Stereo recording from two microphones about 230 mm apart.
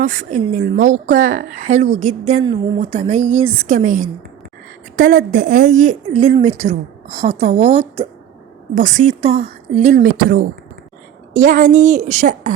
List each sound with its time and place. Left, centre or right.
0.0 s a woman's voice: right